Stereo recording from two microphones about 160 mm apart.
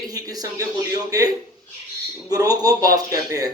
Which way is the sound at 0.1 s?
25° right (ahead or behind).